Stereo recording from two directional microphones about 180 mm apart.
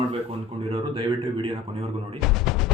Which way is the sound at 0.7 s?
30° right (ahead or behind).